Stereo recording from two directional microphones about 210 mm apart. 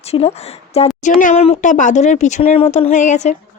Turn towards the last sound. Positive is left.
turn(degrees=35)  # may be behind; listen again after turning